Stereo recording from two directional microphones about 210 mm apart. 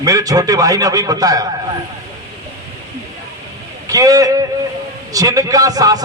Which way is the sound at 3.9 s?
15° right (ahead or behind).